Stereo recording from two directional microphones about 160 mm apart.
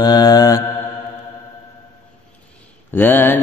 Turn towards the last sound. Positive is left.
turn(degrees=10)  # may be behind; listen again after turning